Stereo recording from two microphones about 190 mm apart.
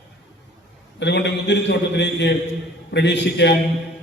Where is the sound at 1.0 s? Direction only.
65° left (ahead or behind).